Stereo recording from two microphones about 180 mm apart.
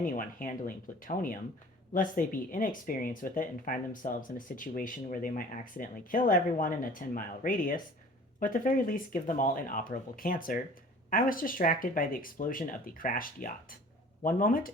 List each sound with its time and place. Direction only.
0.0 s speech: 50° left (ahead or behind)